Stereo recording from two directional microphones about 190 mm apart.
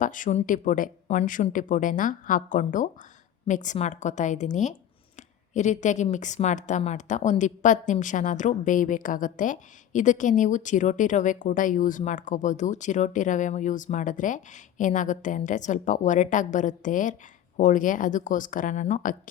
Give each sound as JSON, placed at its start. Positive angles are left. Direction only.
{"t": 0.0, "sound": "a woman's voice", "side_deg": 45}